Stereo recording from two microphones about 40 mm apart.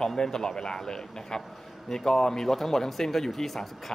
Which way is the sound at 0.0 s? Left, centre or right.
Centre.